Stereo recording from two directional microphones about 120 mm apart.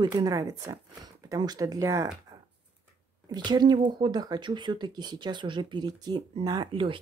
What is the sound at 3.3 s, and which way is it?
Speech, 35° right (ahead or behind).